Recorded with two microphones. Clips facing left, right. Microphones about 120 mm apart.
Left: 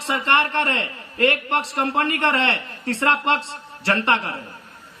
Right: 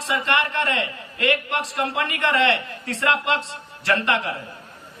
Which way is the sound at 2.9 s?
30° left (ahead or behind).